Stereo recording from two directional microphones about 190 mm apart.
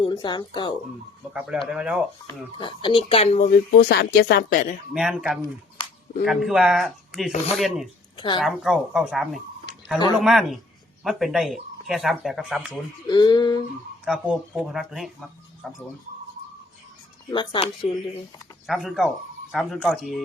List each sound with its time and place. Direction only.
0.0 s speech: 25° left (ahead or behind)
1.3 s speech: 5° right (ahead or behind)
2.2 s speech: 25° left (ahead or behind)
3.7 s speech: 60° left (ahead or behind)
4.9 s speech: 5° right (ahead or behind)
8.1 s a woman's voice: 25° left (ahead or behind)
8.4 s speech: centre (ahead or behind)
13.1 s speech: 20° left (ahead or behind)
14.0 s speech: 5° right (ahead or behind)
17.3 s speech: 25° left (ahead or behind)
18.6 s speech: centre (ahead or behind)